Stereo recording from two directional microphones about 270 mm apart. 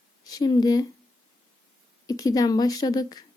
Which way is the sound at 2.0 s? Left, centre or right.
Centre.